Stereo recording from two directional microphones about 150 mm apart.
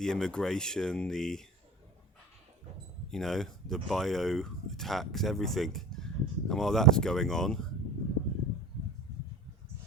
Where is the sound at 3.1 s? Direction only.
5° left (ahead or behind).